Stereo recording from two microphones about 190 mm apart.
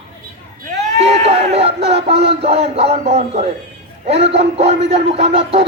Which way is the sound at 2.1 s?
60° right (ahead or behind).